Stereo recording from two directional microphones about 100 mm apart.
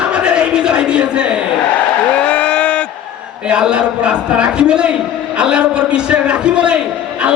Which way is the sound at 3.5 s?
10° right (ahead or behind).